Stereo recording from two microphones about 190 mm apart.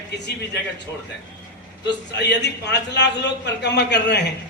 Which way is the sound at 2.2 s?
65° left (ahead or behind).